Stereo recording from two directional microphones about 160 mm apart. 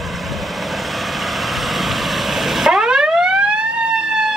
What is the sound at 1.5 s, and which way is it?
Emergency vehicle, centre (ahead or behind).